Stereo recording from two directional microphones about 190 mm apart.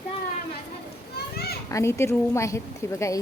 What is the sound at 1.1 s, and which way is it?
Children playing, 55° left (ahead or behind).